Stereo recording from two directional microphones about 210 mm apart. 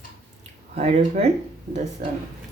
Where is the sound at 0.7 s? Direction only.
30° right (ahead or behind).